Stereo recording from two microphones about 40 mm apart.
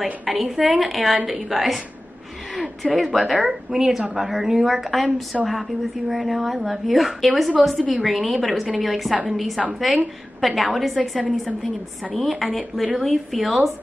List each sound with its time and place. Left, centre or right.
0.0 s a woman's voice: centre
1.1 s a woman's voice: centre
1.5 s a woman's voice: centre
2.5 s a sound: centre
3.0 s a woman's voice: centre
3.7 s a woman's voice: centre